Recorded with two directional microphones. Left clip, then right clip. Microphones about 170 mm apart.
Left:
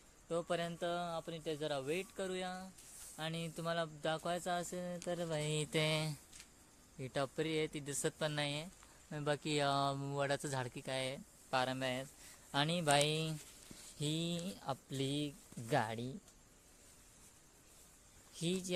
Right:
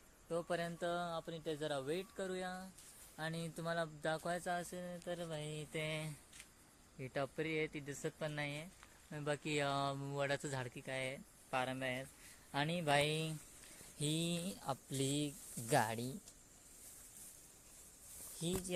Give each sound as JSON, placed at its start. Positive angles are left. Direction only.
{"t": 0.3, "sound": "speech", "side_deg": 15}
{"t": 0.8, "sound": "speech", "side_deg": 0}
{"t": 4.4, "sound": "speech", "side_deg": 25}
{"t": 5.8, "sound": "speech", "side_deg": 40}
{"t": 7.0, "sound": "speech", "side_deg": 25}
{"t": 9.0, "sound": "speech", "side_deg": 15}
{"t": 14.0, "sound": "speech", "side_deg": 0}
{"t": 18.3, "sound": "speech", "side_deg": 15}